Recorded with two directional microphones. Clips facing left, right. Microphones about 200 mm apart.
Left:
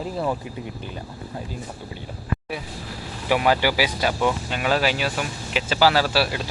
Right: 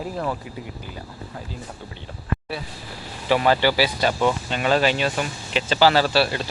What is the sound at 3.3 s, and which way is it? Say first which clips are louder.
Speech: right 1 dB; 10° left (ahead or behind).